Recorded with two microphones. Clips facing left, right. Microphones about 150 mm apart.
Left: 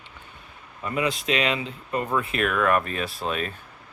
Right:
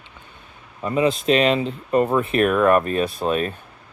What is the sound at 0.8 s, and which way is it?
Speech, 30° right (ahead or behind).